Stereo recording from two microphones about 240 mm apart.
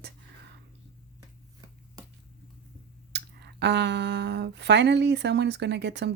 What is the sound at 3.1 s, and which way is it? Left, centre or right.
Speech, right.